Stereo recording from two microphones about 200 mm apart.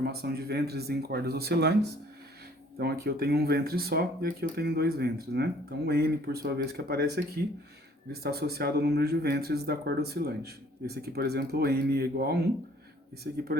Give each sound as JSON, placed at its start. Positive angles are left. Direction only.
{"t": 0.0, "sound": "speech", "side_deg": -50}
{"t": 8.2, "sound": "speech", "side_deg": -50}